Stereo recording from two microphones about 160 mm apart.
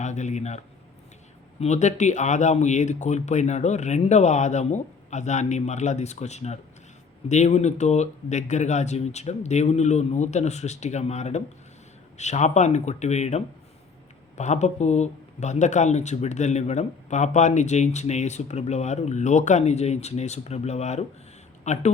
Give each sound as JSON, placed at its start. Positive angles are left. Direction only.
{"t": 0.0, "sound": "a man's voice", "side_deg": 45}